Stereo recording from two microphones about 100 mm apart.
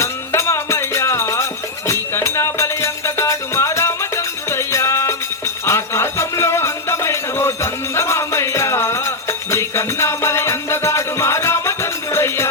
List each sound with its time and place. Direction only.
0.0 s music: 30° left (ahead or behind)